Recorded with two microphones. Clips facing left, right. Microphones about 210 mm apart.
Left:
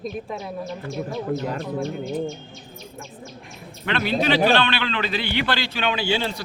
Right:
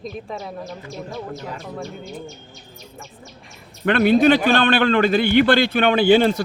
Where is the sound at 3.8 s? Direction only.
50° right (ahead or behind).